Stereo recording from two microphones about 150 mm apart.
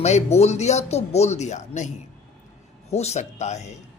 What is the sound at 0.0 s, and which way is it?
Speech, 45° left (ahead or behind).